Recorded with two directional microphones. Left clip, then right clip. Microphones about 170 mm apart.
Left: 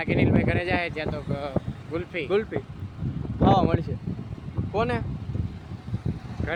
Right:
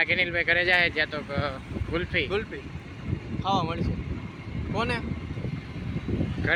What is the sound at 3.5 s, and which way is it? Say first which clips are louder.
Speech: left 5 dB; 70° left (ahead or behind).